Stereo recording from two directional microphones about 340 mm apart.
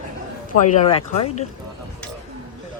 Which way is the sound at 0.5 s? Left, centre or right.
Centre.